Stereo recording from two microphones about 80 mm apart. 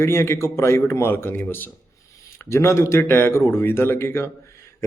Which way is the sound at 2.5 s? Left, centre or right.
Left.